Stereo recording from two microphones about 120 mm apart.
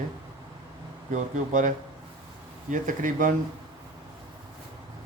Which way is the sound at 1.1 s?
90° right.